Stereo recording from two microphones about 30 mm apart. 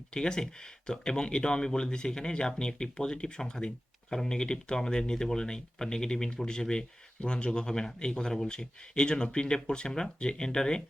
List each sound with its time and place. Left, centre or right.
0.1 s speech: left
7.7 s speech: centre